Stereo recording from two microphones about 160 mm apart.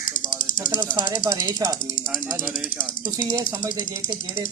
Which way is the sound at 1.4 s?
25° right (ahead or behind).